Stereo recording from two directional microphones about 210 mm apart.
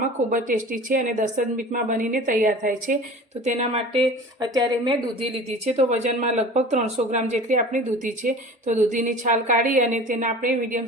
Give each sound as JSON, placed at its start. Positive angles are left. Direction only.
{"t": 0.0, "sound": "speech", "side_deg": -40}